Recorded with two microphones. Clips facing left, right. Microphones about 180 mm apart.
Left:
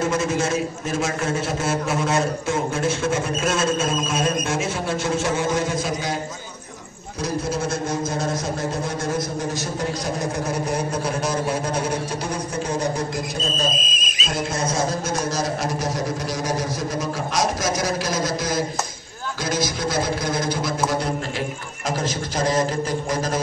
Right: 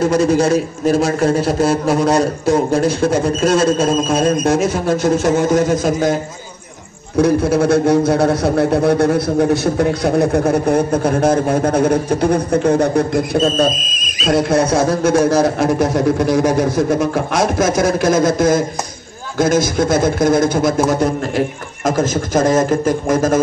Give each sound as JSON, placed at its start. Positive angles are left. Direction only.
{"t": 0.0, "sound": "a man's voice", "side_deg": -35}
{"t": 7.2, "sound": "a man's voice", "side_deg": -60}